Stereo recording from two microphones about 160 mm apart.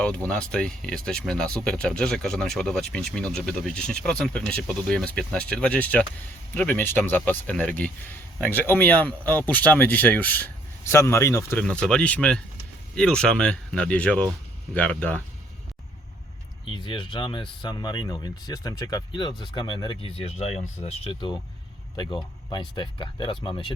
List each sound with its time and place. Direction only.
0.0 s speech: 5° left (ahead or behind)
16.6 s speech: 30° left (ahead or behind)
20.8 s a man's voice: 30° left (ahead or behind)